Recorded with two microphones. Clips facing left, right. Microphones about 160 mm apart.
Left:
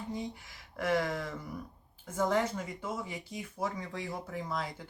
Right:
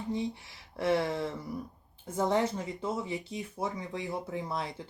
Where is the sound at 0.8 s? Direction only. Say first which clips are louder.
Right 3 dB; 30° right (ahead or behind).